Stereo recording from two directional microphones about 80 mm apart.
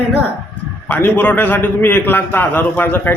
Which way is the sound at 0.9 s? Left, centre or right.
Left.